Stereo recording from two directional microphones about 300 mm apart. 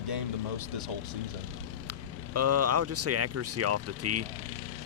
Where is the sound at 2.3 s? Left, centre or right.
Right.